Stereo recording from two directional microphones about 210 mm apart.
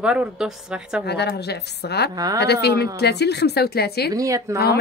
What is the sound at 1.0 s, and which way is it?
A woman's voice, 50° left (ahead or behind).